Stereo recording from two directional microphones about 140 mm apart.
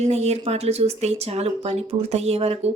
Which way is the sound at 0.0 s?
50° right (ahead or behind).